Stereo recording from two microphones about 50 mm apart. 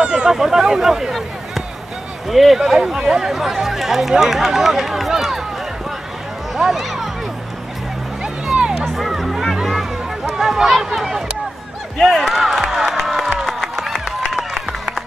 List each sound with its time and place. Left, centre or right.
0.0 s a sound: centre
0.4 s speech: centre
6.5 s speech: centre
8.8 s music: centre
12.0 s speech: centre
13.0 s crowd: centre
14.3 s a sound: centre